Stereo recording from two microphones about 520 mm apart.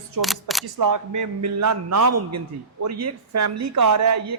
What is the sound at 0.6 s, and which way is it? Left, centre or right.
Speech, right.